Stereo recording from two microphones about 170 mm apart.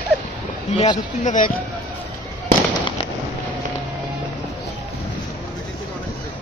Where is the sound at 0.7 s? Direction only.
25° left (ahead or behind).